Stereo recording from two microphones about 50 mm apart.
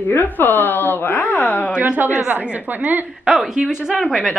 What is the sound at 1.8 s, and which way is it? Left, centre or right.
A woman's voice, right.